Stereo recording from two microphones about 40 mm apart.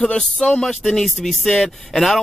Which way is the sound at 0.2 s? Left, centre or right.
Centre.